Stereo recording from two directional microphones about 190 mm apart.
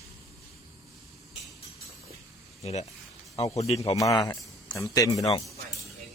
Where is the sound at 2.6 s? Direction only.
35° left (ahead or behind).